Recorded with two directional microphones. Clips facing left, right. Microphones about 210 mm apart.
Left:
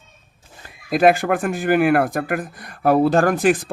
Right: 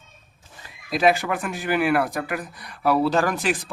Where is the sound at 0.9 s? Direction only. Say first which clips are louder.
Left 5 dB; 50° left (ahead or behind).